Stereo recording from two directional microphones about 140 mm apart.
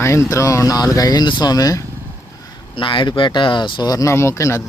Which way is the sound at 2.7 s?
40° left (ahead or behind).